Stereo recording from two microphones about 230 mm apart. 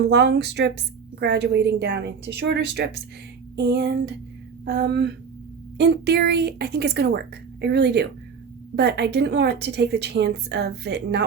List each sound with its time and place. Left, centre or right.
0.1 s a woman's voice: right